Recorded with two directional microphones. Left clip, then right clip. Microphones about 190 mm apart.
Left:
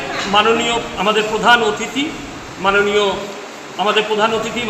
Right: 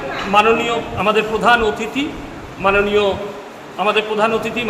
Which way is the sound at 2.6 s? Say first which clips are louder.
Even; 20° right (ahead or behind).